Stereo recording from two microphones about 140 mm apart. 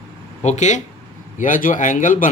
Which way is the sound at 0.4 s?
55° left (ahead or behind).